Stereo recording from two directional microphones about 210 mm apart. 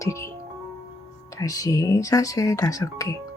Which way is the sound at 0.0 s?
15° left (ahead or behind).